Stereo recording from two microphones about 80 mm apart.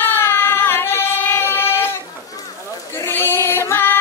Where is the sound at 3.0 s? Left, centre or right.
Left.